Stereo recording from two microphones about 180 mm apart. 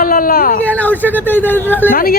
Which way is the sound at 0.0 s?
55° left (ahead or behind).